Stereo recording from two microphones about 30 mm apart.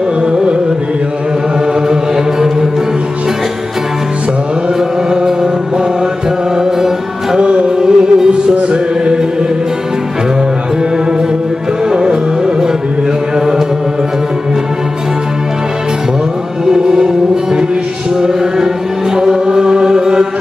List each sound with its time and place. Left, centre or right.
5.1 s music: centre
7.3 s music: right
11.9 s music: right
16.6 s music: right
19.1 s chant: right